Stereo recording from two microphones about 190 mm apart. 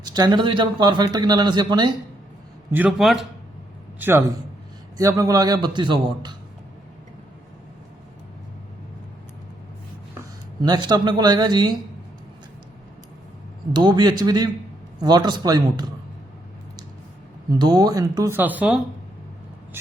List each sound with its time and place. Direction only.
0.0 s a man's voice: 20° right (ahead or behind)
2.7 s a man's voice: 5° right (ahead or behind)
4.9 s a man's voice: 15° right (ahead or behind)
10.6 s a man's voice: 20° right (ahead or behind)
13.7 s a man's voice: 20° right (ahead or behind)
17.6 s speech: 20° right (ahead or behind)